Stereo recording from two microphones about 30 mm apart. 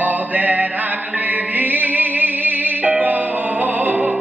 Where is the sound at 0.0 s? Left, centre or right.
Right.